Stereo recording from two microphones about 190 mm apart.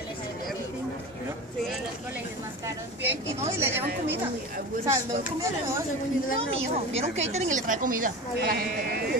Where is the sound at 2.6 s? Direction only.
10° right (ahead or behind).